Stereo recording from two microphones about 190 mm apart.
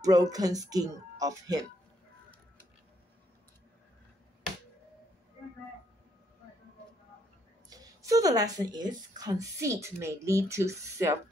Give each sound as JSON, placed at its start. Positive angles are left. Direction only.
{"t": 0.0, "sound": "speech", "side_deg": -20}
{"t": 7.7, "sound": "speech", "side_deg": -20}